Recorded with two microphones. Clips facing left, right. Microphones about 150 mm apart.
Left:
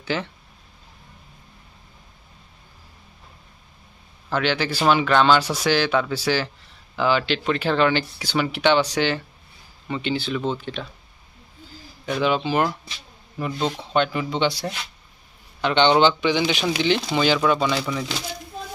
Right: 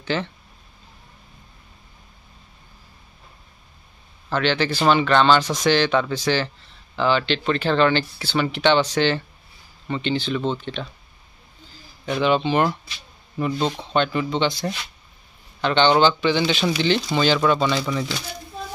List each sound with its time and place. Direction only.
0.0 s speech: 10° left (ahead or behind)
4.3 s speech: 10° left (ahead or behind)
12.2 s speech: 5° left (ahead or behind)